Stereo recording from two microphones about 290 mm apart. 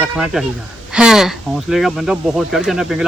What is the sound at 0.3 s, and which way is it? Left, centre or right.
Speech, centre.